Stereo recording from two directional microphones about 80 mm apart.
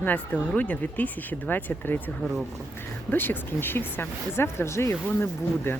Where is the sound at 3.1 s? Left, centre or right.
Left.